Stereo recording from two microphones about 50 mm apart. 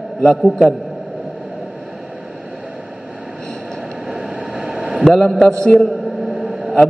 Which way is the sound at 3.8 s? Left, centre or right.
Centre.